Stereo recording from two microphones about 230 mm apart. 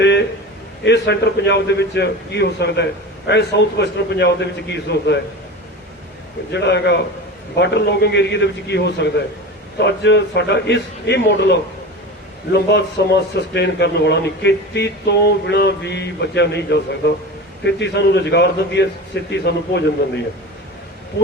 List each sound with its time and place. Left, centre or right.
0.0 s a sound: left
0.9 s speech: left
6.5 s speech: left
12.5 s speech: left